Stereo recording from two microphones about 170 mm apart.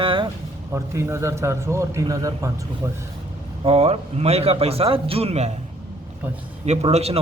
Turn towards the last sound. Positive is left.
turn(degrees=-35)  # may be behind; listen again after turning